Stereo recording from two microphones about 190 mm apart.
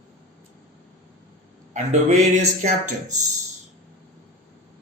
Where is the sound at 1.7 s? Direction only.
35° right (ahead or behind).